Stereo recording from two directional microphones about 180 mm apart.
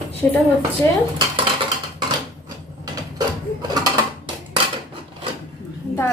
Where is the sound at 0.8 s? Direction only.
15° left (ahead or behind).